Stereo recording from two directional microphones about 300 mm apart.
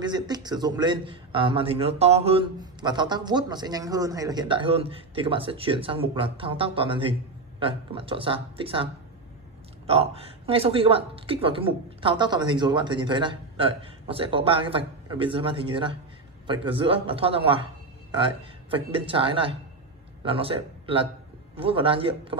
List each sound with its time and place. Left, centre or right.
0.0 s a man's voice: centre
9.8 s a man's voice: centre